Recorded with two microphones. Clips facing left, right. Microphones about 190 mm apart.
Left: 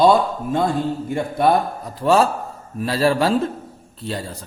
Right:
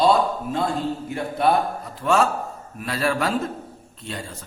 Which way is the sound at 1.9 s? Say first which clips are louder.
Left 4 dB; 35° left (ahead or behind).